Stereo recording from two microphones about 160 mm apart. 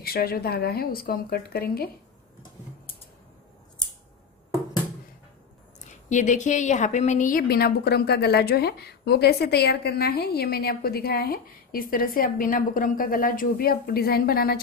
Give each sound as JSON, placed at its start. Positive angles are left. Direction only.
{"t": 0.0, "sound": "a woman's voice", "side_deg": 70}
{"t": 5.9, "sound": "a woman's voice", "side_deg": 50}